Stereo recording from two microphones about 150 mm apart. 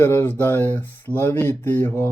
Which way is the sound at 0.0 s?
15° left (ahead or behind).